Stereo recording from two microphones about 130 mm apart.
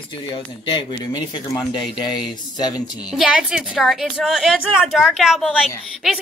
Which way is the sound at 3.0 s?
5° right (ahead or behind).